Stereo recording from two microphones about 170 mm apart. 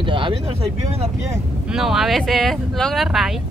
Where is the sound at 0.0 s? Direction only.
30° right (ahead or behind).